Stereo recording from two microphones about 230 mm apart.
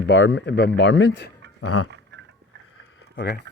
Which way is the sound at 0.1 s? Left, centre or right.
Left.